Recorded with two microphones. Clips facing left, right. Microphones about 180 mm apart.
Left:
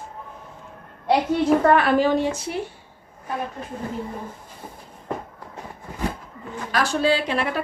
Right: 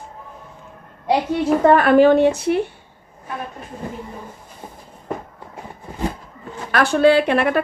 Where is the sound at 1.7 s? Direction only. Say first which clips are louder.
Right 6 dB; 50° right (ahead or behind).